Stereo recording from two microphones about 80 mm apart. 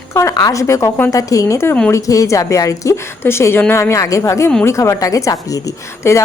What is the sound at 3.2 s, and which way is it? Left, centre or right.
A woman's voice, left.